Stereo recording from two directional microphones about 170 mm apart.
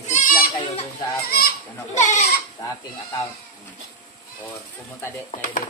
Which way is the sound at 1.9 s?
45° left (ahead or behind).